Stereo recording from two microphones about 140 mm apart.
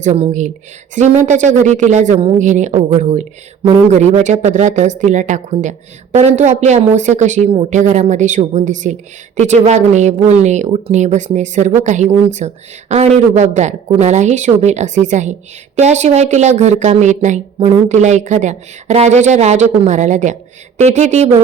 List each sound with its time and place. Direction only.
0.0 s speech: 55° right (ahead or behind)